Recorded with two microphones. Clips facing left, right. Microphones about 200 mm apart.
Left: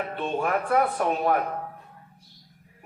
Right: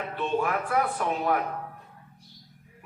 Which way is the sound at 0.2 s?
35° left (ahead or behind).